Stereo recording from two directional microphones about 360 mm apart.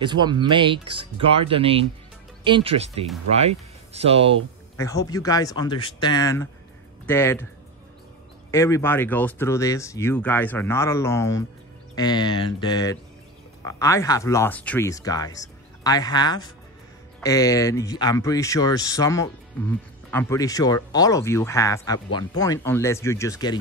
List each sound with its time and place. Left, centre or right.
0.0 s speech: centre
4.7 s speech: centre
8.5 s speech: centre